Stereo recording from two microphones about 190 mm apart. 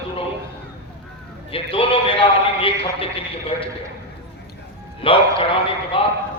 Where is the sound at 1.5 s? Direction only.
30° left (ahead or behind).